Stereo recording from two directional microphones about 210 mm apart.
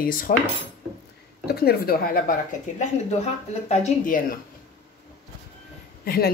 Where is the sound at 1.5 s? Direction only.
50° left (ahead or behind).